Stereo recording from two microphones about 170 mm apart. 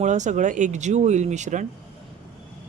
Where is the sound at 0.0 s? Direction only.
45° right (ahead or behind).